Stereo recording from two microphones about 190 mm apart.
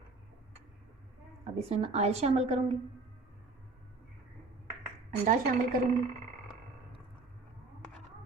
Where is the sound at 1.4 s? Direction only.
35° right (ahead or behind).